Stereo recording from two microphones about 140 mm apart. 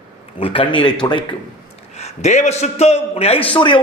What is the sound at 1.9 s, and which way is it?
A man's voice, 50° left (ahead or behind).